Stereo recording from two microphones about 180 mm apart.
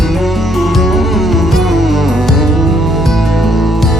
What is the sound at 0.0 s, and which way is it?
Music, centre (ahead or behind).